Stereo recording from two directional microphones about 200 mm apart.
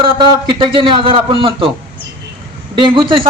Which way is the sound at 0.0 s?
25° right (ahead or behind).